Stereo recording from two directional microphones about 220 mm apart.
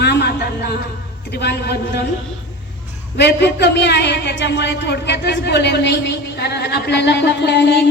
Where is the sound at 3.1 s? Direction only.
50° left (ahead or behind).